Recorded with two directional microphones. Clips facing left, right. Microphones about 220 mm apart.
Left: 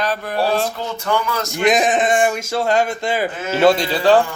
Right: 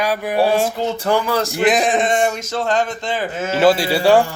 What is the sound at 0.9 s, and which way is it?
Speech, 30° right (ahead or behind).